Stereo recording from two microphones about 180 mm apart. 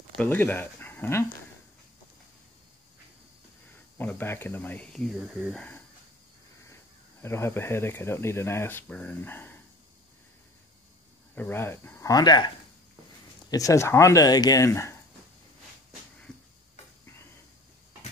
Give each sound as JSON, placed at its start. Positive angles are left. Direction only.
{"t": 0.2, "sound": "speech", "side_deg": 10}
{"t": 4.0, "sound": "speech", "side_deg": 10}
{"t": 6.7, "sound": "speech", "side_deg": 15}
{"t": 11.3, "sound": "speech", "side_deg": 10}
{"t": 13.5, "sound": "speech", "side_deg": 20}
{"t": 16.3, "sound": "tick-tock", "side_deg": 5}